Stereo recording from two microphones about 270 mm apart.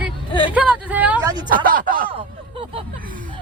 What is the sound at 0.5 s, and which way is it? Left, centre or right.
Speech, centre.